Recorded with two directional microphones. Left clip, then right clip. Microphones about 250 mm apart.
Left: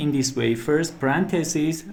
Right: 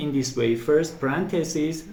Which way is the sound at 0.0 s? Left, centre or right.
Left.